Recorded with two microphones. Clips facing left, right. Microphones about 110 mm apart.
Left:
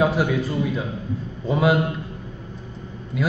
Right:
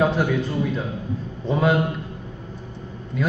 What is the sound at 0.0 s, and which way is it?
A man's voice, 5° left (ahead or behind).